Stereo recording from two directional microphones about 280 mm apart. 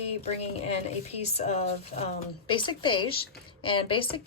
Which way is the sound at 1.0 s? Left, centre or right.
Left.